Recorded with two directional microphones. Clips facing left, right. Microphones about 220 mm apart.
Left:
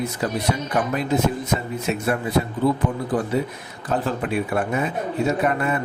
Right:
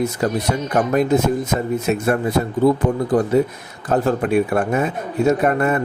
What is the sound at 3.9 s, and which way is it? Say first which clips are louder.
A man's voice: right 6 dB; 45° right (ahead or behind).